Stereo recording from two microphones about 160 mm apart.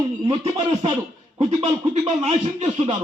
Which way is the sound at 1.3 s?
40° right (ahead or behind).